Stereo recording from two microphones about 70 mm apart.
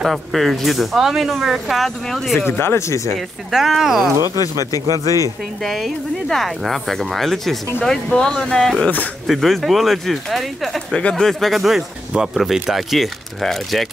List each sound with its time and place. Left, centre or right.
0.0 s speech: centre
2.3 s speech: left
3.2 s speech: centre
5.6 s speech: centre
8.8 s speech: left
9.3 s speech: centre
11.0 s speech: centre